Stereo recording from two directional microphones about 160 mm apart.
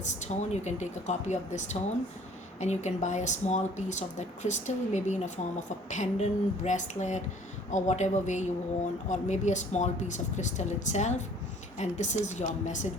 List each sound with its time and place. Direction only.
0.0 s speech: 45° left (ahead or behind)